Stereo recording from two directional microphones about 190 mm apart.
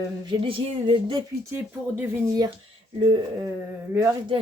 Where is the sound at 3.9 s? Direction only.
15° right (ahead or behind).